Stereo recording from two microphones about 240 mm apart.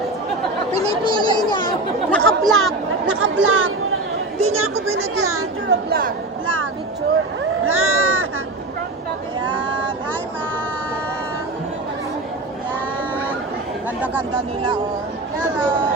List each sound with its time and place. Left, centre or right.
0.8 s speech: centre
2.0 s speech: centre
3.1 s speech: right
4.7 s speech: centre
5.4 s speech: right
7.6 s speech: right
9.4 s a sound: centre